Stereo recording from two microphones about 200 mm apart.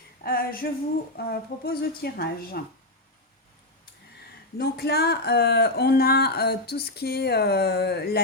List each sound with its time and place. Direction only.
0.2 s speech: 45° left (ahead or behind)
4.5 s speech: 50° left (ahead or behind)